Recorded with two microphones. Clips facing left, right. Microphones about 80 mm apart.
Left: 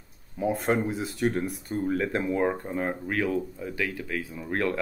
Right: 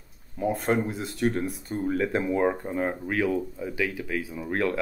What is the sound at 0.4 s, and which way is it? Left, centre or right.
Speech, centre.